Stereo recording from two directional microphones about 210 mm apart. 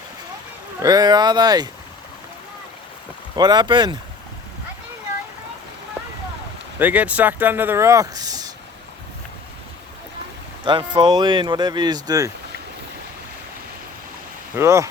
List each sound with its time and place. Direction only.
0.8 s speech: 20° right (ahead or behind)
3.3 s speech: 20° right (ahead or behind)
6.7 s speech: 5° right (ahead or behind)
10.6 s speech: 20° right (ahead or behind)
14.5 s speech: 15° right (ahead or behind)